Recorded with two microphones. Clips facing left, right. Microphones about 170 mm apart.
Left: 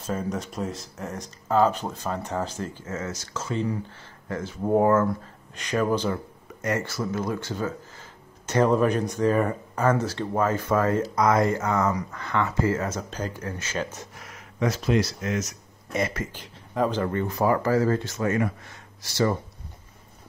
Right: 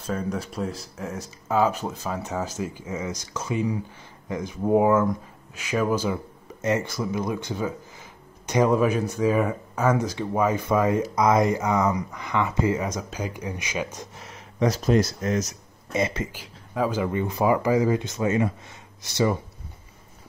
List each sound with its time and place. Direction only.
0.0 s speech: centre (ahead or behind)
6.6 s speech: 20° right (ahead or behind)
14.1 s speech: 25° right (ahead or behind)
15.9 s speech: 20° right (ahead or behind)
16.3 s speech: 5° right (ahead or behind)